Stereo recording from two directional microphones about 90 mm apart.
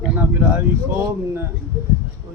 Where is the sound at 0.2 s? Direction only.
20° right (ahead or behind).